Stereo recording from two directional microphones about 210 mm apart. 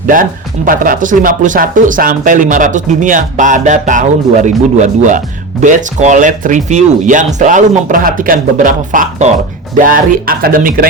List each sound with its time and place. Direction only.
0.1 s speech: 40° right (ahead or behind)